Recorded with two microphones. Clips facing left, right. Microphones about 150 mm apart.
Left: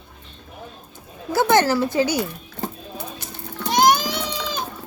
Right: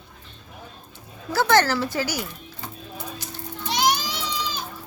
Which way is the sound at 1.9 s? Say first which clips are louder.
Left 7 dB; 25° left (ahead or behind).